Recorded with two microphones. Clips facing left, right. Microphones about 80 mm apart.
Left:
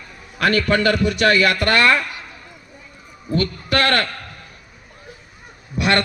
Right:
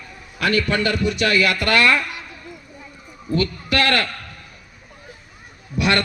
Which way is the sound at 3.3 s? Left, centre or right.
Left.